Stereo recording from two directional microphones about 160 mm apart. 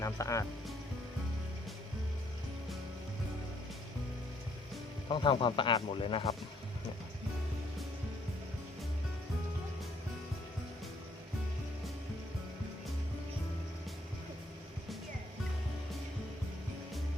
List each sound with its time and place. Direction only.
0.0 s speech: 20° left (ahead or behind)
5.0 s speech: 30° left (ahead or behind)